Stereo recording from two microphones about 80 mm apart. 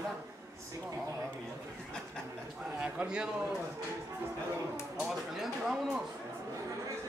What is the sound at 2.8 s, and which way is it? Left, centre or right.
Speech, centre.